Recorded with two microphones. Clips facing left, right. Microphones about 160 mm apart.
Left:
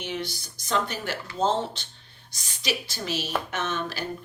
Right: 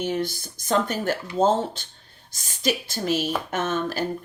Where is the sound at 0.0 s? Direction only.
50° right (ahead or behind).